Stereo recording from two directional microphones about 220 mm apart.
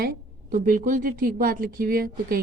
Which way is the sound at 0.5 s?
35° right (ahead or behind).